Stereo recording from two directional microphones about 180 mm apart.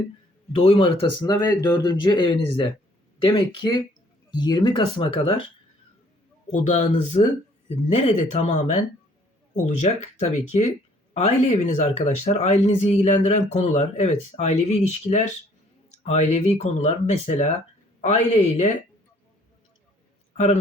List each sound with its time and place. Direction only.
0.5 s speech: 30° left (ahead or behind)
6.5 s speech: 40° left (ahead or behind)
20.3 s a man's voice: 35° left (ahead or behind)